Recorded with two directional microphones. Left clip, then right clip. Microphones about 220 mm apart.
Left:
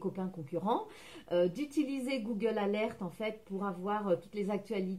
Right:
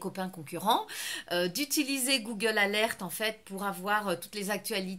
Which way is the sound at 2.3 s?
15° right (ahead or behind).